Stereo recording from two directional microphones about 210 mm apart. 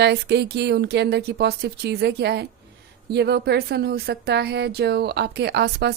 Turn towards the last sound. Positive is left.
turn(degrees=-50)  # may be behind; listen again after turning